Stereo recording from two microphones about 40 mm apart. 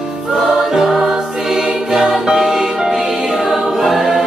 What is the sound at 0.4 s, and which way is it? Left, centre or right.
Music, centre.